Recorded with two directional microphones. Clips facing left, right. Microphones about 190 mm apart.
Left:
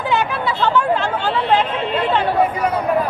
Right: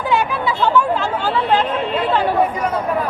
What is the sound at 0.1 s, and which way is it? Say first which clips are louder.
Chatter: right 2 dB; 10° right (ahead or behind).